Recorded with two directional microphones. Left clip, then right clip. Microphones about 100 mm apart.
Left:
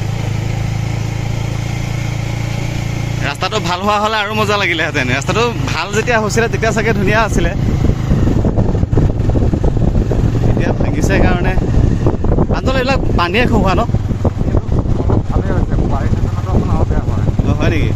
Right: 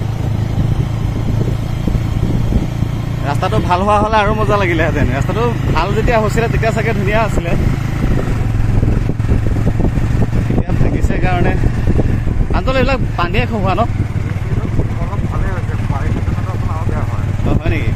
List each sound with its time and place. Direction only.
3.3 s speech: centre (ahead or behind); by 6.4 s 20° left (ahead or behind)
6.4 s speech: 35° left (ahead or behind)
11.1 s speech: 25° left (ahead or behind)
12.6 s speech: 40° left (ahead or behind)
17.5 s vehicle: 20° left (ahead or behind)